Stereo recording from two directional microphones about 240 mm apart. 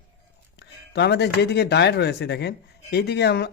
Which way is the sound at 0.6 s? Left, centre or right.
Left.